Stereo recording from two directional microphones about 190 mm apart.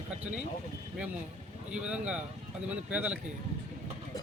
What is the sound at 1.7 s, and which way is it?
A man's voice, 5° right (ahead or behind).